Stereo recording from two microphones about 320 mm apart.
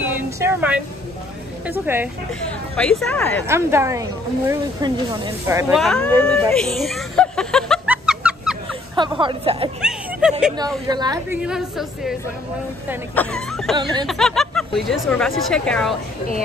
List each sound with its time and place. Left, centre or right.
0.0 s a sound: centre
1.7 s a woman's voice: centre
3.4 s speech: centre
6.2 s music: centre
9.2 s speech: centre
9.8 s a woman's voice: centre